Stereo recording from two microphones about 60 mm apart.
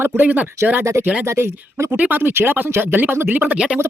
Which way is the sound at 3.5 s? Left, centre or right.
Centre.